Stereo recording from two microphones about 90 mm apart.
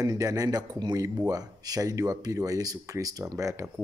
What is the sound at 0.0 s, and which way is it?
Speech, 40° right (ahead or behind).